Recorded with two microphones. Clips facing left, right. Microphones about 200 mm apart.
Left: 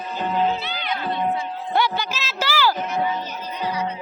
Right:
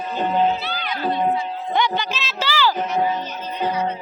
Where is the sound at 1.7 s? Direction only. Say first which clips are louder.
Even; 5° left (ahead or behind).